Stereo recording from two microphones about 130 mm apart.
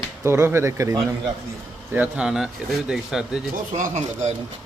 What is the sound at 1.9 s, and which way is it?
Speech, 10° right (ahead or behind).